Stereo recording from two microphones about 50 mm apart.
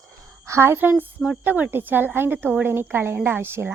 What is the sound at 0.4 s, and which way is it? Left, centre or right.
Speech, right.